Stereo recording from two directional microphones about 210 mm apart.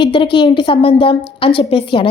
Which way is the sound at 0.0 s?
25° left (ahead or behind).